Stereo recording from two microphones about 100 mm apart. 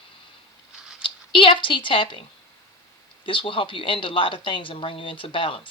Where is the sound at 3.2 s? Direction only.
60° left (ahead or behind).